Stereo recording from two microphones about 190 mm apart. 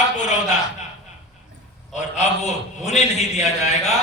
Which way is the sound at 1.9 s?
35° left (ahead or behind).